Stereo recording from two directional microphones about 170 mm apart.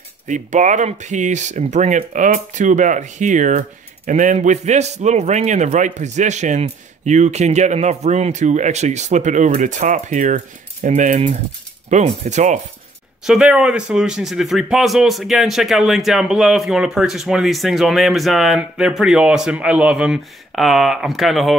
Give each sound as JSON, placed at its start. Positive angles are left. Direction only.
{"t": 0.3, "sound": "speech", "side_deg": -45}
{"t": 13.2, "sound": "speech", "side_deg": -5}